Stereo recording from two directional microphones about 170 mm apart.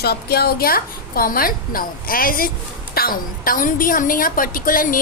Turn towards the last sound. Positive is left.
turn(degrees=55)  # may be behind; listen again after turning